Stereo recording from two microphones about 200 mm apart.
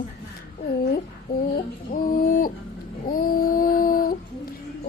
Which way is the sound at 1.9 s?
45° left (ahead or behind).